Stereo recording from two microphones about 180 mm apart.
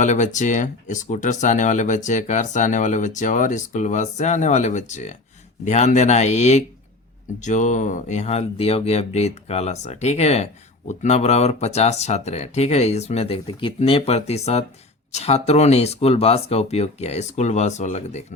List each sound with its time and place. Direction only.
0.0 s speech: 40° left (ahead or behind)